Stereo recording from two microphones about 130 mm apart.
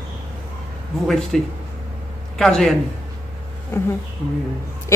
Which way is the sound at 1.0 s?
Centre (ahead or behind).